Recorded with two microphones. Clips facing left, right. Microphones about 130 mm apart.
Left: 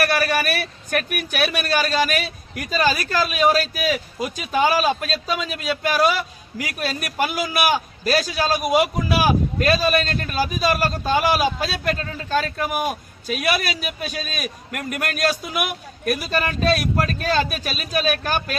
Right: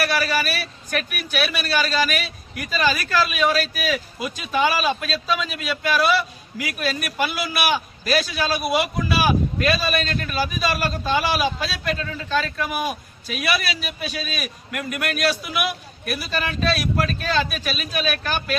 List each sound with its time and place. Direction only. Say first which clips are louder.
0.0 s a man's voice: left 2 dB; 55° left (ahead or behind)